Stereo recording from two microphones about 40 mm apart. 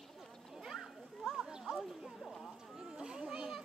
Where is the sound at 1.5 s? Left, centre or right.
Centre.